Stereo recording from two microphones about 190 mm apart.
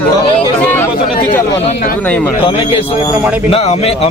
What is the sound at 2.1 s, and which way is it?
Speech, 5° left (ahead or behind).